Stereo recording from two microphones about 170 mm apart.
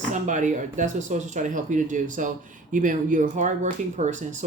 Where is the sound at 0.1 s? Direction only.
45° right (ahead or behind).